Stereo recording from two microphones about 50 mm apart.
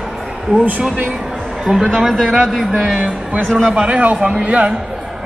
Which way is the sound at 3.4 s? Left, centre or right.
Centre.